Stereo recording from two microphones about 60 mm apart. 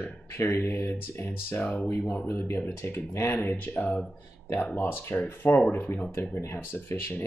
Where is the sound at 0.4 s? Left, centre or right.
Left.